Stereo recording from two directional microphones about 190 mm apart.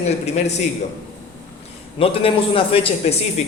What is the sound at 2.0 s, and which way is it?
A man's voice, 30° left (ahead or behind).